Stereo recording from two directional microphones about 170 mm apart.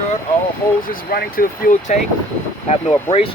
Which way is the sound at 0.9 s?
60° left (ahead or behind).